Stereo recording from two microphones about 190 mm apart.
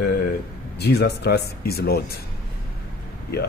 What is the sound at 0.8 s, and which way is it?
Speech, 60° left (ahead or behind).